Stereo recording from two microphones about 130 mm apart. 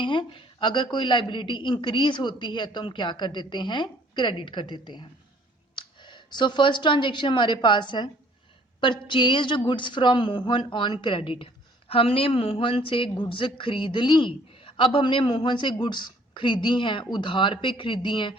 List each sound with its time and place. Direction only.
0.0 s a woman's voice: 40° left (ahead or behind)